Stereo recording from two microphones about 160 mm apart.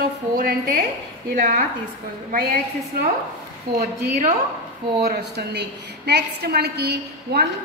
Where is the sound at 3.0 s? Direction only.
70° right (ahead or behind).